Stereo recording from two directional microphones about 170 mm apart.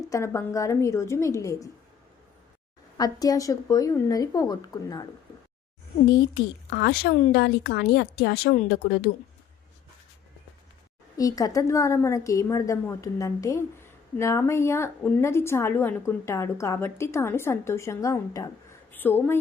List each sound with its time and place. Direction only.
0.1 s a woman's voice: 15° left (ahead or behind)
3.0 s a woman's voice: 20° left (ahead or behind)
6.3 s a woman's voice: 75° left (ahead or behind)
11.2 s a woman's voice: 20° left (ahead or behind)